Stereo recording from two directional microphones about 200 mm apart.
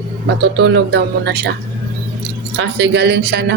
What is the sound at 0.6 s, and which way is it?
Speech, 60° right (ahead or behind).